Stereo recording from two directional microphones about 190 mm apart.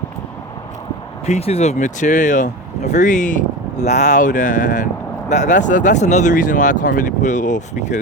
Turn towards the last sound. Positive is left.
turn(degrees=40)  # may be behind; listen again after turning